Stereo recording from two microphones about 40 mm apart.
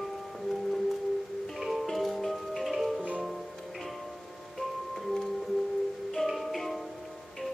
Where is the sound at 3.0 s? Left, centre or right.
Right.